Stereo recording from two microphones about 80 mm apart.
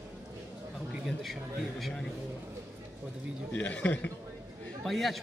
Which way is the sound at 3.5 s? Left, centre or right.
Centre.